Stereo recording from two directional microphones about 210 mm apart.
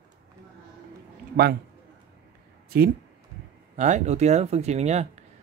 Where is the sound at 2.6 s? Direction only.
45° right (ahead or behind).